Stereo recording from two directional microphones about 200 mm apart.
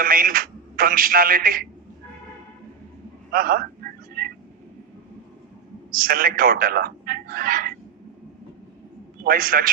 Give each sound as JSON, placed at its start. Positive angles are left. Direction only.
{"t": 0.0, "sound": "speech", "side_deg": -45}
{"t": 3.3, "sound": "a man's voice", "side_deg": -45}
{"t": 4.2, "sound": "a sound", "side_deg": -45}
{"t": 5.9, "sound": "a man's voice", "side_deg": -45}
{"t": 9.2, "sound": "a man's voice", "side_deg": -45}